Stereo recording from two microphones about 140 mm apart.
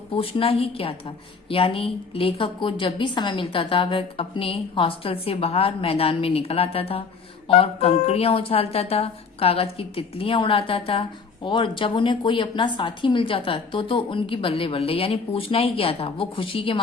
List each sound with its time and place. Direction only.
0.1 s a woman's voice: 40° left (ahead or behind)